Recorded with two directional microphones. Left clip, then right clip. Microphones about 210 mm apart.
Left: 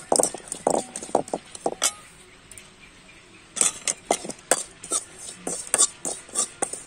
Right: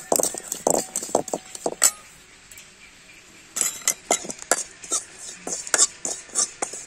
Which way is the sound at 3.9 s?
Centre (ahead or behind).